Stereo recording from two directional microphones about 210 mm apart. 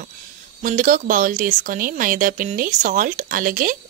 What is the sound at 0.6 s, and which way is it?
Speech, 40° right (ahead or behind).